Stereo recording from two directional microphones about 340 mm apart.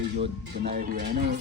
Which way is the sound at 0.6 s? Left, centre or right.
Right.